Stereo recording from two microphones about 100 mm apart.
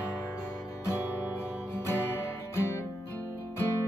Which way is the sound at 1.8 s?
25° left (ahead or behind).